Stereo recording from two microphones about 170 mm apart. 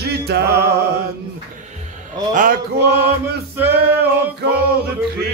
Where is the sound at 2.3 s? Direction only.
60° right (ahead or behind).